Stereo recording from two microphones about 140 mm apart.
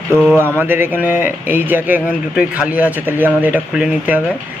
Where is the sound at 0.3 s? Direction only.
15° right (ahead or behind).